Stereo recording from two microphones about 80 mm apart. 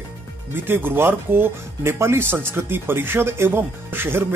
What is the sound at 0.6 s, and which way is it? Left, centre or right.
Speech, right.